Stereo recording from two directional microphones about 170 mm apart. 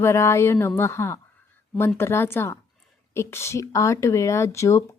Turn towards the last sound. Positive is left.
turn(degrees=15)  # may be behind; listen again after turning